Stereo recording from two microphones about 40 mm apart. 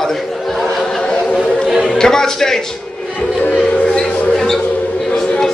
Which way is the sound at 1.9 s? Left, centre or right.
Centre.